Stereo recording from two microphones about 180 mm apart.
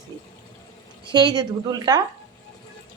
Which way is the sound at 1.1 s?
25° right (ahead or behind).